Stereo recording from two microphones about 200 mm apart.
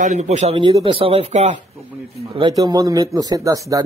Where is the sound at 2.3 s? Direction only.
20° right (ahead or behind).